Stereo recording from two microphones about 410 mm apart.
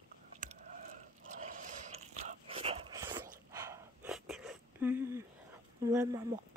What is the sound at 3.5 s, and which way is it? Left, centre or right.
Wheeze, centre.